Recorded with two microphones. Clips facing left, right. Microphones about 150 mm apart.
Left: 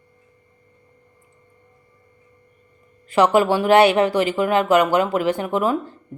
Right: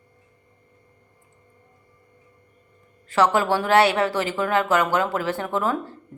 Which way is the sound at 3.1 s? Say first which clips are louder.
Left 4 dB; 15° left (ahead or behind).